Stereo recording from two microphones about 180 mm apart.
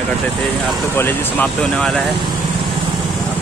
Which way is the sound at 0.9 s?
10° left (ahead or behind).